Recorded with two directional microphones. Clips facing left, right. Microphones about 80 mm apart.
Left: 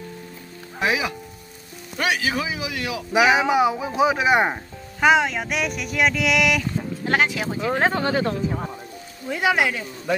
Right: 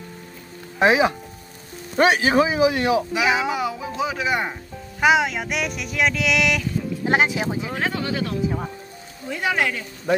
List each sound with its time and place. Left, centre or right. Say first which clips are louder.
0.7 s a man's voice: right 6 dB; right
3.1 s speech: left 4 dB; left
5.0 s speech: even; centre
7.1 s speech: right 1 dB; right
7.7 s speech: left 4 dB; left
9.3 s speech: left 2 dB; centre